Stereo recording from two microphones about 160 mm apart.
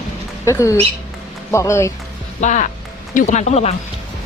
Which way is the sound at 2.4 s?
50° left (ahead or behind).